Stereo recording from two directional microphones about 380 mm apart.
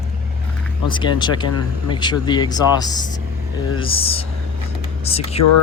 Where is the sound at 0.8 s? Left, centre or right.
Centre.